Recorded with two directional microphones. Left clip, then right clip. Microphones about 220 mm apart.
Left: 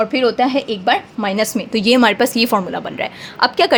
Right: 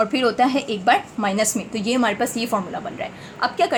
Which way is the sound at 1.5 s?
45° left (ahead or behind).